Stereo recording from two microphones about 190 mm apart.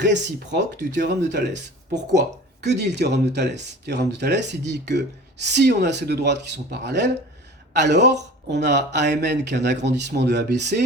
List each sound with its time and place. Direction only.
0.0 s speech: 65° right (ahead or behind)